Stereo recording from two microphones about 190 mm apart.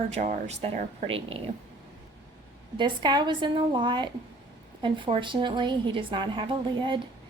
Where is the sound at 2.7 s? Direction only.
25° right (ahead or behind).